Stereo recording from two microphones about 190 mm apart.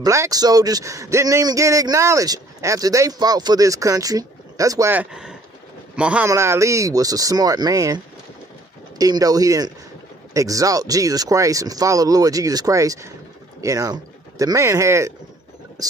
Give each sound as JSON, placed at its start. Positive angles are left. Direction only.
{"t": 0.0, "sound": "a man's voice", "side_deg": -15}